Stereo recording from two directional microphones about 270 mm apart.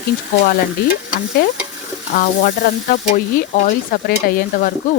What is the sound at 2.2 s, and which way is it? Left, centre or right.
Speech, left.